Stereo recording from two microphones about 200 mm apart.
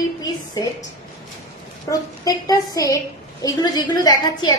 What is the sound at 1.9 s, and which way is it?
A woman's voice, 15° left (ahead or behind).